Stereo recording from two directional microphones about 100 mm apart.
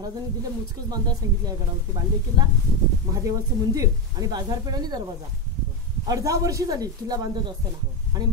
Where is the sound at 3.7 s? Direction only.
35° right (ahead or behind).